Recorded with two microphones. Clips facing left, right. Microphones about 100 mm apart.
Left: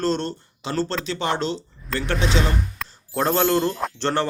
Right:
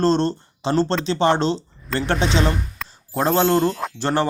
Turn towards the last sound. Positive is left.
turn(degrees=-10)  # may be behind; listen again after turning